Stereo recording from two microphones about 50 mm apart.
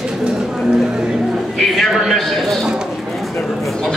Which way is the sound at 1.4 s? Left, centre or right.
Centre.